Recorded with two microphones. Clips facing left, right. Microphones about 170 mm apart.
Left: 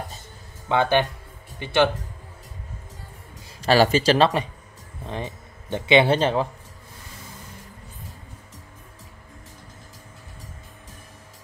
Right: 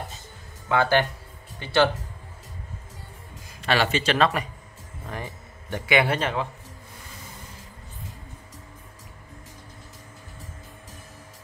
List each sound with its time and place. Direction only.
0.7 s speech: 20° left (ahead or behind)
3.6 s speech: 40° left (ahead or behind)